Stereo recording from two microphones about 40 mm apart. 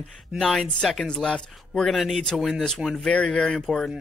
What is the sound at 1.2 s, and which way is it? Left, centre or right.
Speech, left.